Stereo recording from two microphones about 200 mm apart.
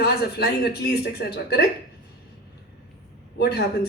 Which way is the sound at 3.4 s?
50° left (ahead or behind).